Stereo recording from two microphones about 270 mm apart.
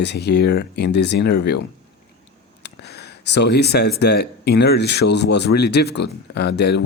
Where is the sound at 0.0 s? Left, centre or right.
Left.